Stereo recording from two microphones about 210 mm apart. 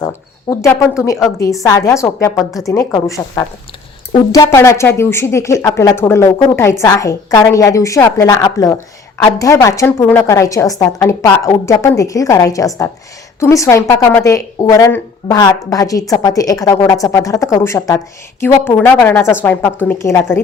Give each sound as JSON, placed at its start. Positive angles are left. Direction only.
{"t": 0.5, "sound": "speech", "side_deg": 15}